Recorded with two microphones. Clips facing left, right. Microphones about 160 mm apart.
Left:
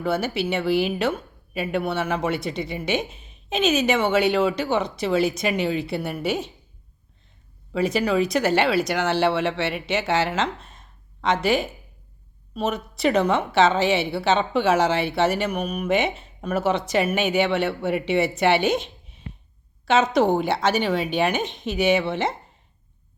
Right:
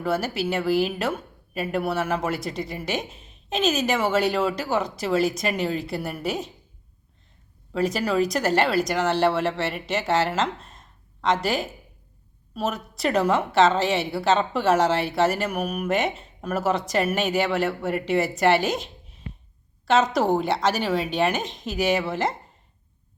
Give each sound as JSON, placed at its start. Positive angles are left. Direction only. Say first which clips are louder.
{"t": 0.0, "sound": "a woman's voice", "louder": "left 1 dB", "side_deg": 0}
{"t": 7.7, "sound": "a woman's voice", "louder": "left 2 dB", "side_deg": 0}